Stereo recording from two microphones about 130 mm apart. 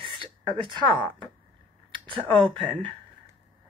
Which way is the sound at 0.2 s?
40° right (ahead or behind).